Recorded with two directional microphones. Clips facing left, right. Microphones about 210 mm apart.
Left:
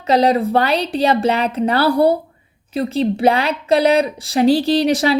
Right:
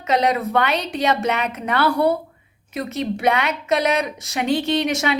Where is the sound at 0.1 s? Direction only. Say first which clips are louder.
Left 5 dB; 35° left (ahead or behind).